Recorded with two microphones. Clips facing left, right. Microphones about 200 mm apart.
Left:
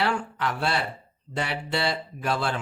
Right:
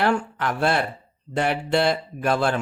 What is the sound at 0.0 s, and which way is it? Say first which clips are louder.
Speech: right 4 dB; 50° right (ahead or behind).